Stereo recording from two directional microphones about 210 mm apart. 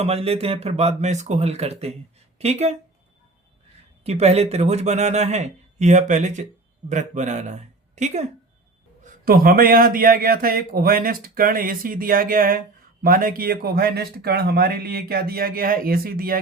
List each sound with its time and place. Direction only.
0.0 s speech: 30° right (ahead or behind)
4.0 s speech: 30° right (ahead or behind)
9.2 s speech: 45° right (ahead or behind)